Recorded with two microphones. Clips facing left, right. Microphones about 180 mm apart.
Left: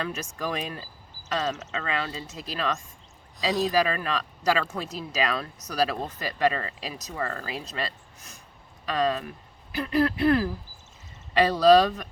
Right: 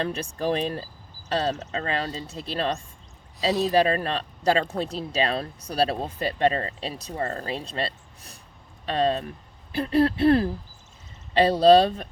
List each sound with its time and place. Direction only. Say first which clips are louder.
0.0 s speech: right 4 dB; 30° right (ahead or behind)